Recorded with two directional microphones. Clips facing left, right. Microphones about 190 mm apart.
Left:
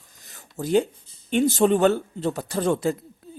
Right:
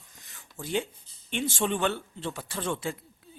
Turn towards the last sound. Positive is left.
turn(degrees=40)  # may be behind; listen again after turning